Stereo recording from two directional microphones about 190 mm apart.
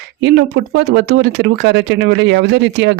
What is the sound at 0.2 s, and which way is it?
Speech, 70° right (ahead or behind).